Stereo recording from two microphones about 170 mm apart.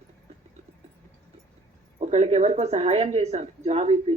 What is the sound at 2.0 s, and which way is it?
A woman's voice, 40° right (ahead or behind).